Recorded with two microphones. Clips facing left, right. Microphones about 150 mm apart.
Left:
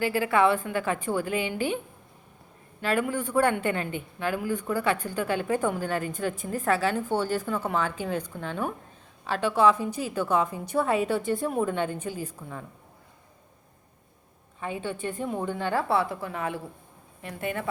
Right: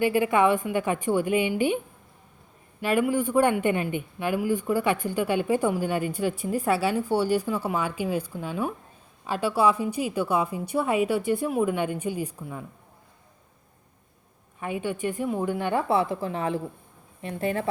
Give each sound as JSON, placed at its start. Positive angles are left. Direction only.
{"t": 0.0, "sound": "speech", "side_deg": -20}
{"t": 2.8, "sound": "speech", "side_deg": -15}
{"t": 14.6, "sound": "speech", "side_deg": -15}